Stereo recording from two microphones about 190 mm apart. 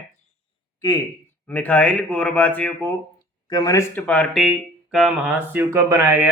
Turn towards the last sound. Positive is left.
turn(degrees=-10)  # may be behind; listen again after turning